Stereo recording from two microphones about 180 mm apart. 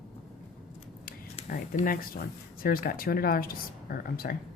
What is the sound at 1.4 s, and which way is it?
Speech, 50° left (ahead or behind).